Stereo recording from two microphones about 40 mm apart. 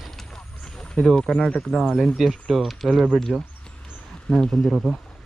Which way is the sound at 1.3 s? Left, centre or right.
Centre.